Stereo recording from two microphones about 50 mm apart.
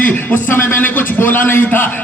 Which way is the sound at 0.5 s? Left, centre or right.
Left.